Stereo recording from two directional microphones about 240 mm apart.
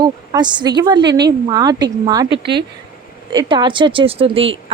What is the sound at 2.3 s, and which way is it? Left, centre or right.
Speech, right.